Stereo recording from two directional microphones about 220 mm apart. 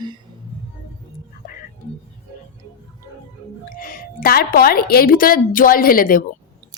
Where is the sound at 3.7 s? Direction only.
40° left (ahead or behind).